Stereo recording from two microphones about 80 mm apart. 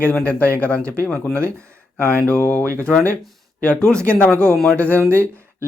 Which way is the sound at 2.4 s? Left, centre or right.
Left.